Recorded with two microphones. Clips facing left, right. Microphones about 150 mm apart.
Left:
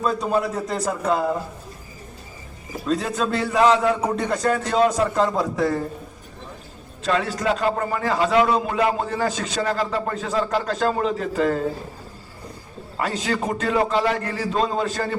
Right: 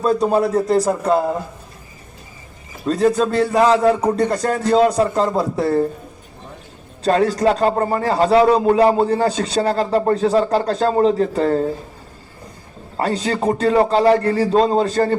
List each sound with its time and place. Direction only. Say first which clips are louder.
0.0 s a man's voice: right 6 dB; 35° right (ahead or behind)
2.8 s a man's voice: right 7 dB; 40° right (ahead or behind)
7.0 s a man's voice: right 7 dB; 40° right (ahead or behind)
13.0 s a man's voice: right 5 dB; 35° right (ahead or behind)